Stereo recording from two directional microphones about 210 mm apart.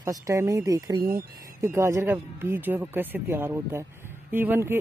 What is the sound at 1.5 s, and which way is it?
Speech, 10° right (ahead or behind).